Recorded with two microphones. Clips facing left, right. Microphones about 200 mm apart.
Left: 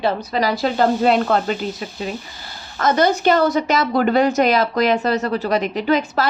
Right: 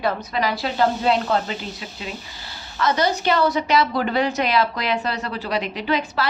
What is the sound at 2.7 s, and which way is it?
A woman's voice, 50° left (ahead or behind).